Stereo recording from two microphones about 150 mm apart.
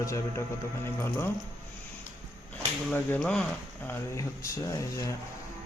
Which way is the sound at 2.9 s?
10° left (ahead or behind).